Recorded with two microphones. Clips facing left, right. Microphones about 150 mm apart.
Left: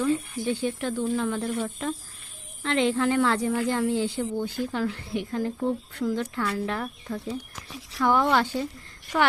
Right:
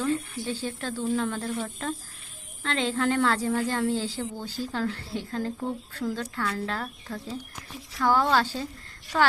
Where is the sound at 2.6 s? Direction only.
20° left (ahead or behind).